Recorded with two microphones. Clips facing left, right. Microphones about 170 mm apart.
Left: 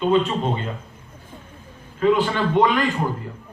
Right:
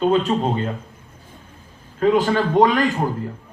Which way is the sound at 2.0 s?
40° right (ahead or behind).